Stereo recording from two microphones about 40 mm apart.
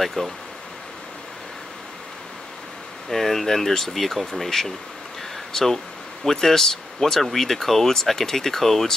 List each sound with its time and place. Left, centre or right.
0.0 s speech: centre
3.1 s speech: centre